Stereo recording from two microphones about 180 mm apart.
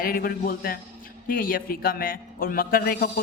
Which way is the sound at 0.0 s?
55° left (ahead or behind).